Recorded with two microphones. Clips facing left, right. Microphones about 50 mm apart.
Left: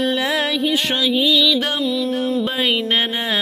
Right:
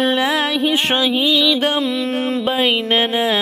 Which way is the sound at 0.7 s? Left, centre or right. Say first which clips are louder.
Right 3 dB; right.